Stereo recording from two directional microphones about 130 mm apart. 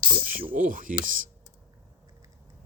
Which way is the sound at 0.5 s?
90° right.